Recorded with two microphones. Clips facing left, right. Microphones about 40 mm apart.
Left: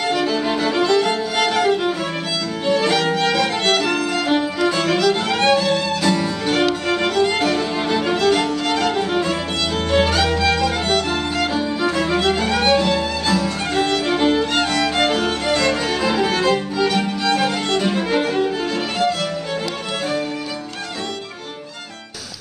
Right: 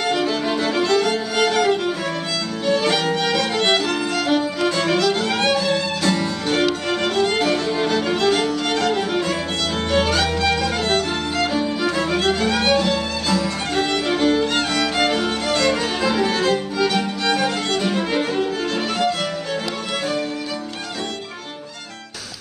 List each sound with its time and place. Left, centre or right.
0.0 s music: centre
2.8 s music: centre
3.2 s music: centre
3.8 s violin: centre
4.6 s music: centre
4.8 s music: centre
13.8 s music: centre
14.1 s music: centre
17.6 s violin: centre